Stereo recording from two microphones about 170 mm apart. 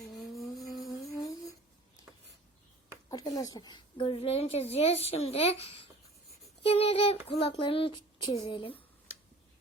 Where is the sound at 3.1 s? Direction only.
20° left (ahead or behind).